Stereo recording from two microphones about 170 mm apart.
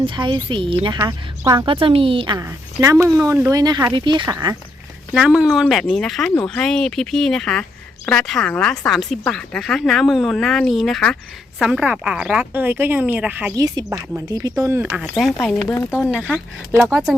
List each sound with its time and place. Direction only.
0.0 s a woman's voice: 30° right (ahead or behind)
5.1 s speech: 5° right (ahead or behind)
13.6 s speech: 20° right (ahead or behind)
15.1 s speech: centre (ahead or behind)
15.6 s speech: 15° left (ahead or behind)
16.3 s speech: centre (ahead or behind)